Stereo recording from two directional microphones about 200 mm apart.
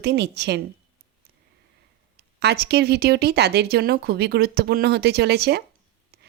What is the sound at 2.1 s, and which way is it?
Speech, 55° right (ahead or behind).